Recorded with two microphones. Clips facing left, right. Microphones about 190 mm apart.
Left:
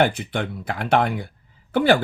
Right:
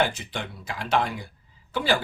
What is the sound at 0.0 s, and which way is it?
Speech, 55° left (ahead or behind).